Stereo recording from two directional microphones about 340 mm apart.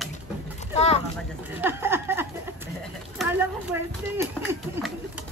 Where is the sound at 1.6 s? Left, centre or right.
Centre.